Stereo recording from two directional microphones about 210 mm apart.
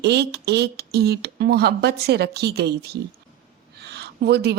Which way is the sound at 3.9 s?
50° right (ahead or behind).